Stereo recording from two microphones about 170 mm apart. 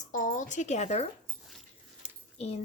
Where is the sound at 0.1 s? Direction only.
50° left (ahead or behind).